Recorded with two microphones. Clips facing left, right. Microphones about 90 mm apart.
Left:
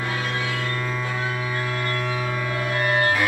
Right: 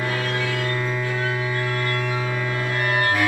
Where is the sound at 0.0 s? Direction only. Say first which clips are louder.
Right 2 dB; 20° left (ahead or behind).